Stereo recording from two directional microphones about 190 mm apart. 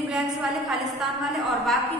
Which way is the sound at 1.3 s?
Centre (ahead or behind).